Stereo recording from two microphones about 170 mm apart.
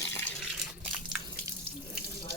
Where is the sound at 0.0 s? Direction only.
10° left (ahead or behind).